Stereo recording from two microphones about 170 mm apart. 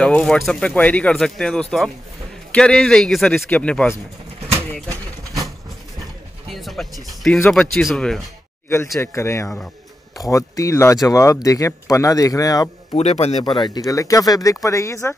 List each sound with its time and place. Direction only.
0.0 s speech: 5° left (ahead or behind)
4.8 s bird: 20° right (ahead or behind)
6.5 s music: centre (ahead or behind)
7.3 s speech: 10° left (ahead or behind)
9.0 s speech: 15° left (ahead or behind)
12.9 s a man's voice: 40° left (ahead or behind)
13.4 s speech: 25° left (ahead or behind)